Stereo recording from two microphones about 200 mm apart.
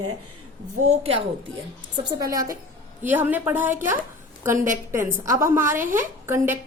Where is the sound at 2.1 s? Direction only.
15° right (ahead or behind).